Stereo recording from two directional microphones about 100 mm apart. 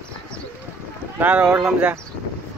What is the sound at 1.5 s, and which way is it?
Speech, 30° right (ahead or behind).